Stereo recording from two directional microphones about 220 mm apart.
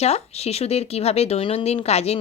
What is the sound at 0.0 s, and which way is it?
Speech, 30° left (ahead or behind).